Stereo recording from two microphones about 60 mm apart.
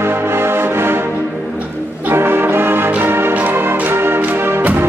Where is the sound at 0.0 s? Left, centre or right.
Right.